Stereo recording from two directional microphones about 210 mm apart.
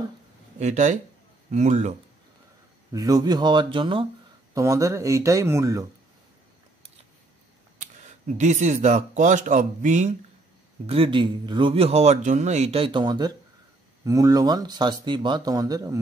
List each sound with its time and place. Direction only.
0.6 s speech: 35° right (ahead or behind)
2.9 s speech: 15° right (ahead or behind)
8.4 s speech: 35° right (ahead or behind)
10.9 s speech: 25° right (ahead or behind)